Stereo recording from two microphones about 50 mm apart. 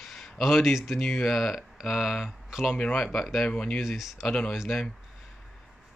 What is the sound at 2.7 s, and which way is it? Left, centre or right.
Speech, centre.